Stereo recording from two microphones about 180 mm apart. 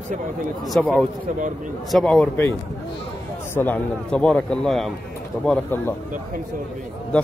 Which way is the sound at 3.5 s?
10° left (ahead or behind).